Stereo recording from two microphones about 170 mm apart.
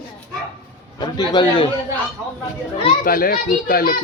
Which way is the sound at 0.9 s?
25° left (ahead or behind).